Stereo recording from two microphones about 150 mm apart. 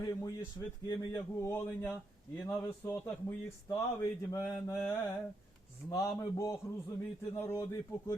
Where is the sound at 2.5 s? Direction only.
20° left (ahead or behind).